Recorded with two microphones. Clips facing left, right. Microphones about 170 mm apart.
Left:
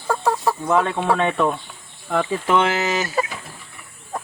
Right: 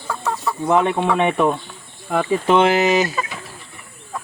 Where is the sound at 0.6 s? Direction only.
20° right (ahead or behind).